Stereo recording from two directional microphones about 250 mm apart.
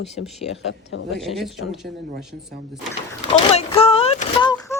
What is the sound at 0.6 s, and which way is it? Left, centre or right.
Speech, left.